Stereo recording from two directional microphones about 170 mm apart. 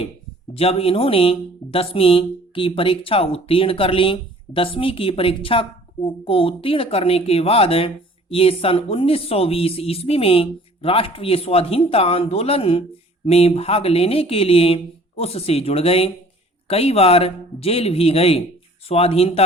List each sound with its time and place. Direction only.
0.5 s speech: 35° left (ahead or behind)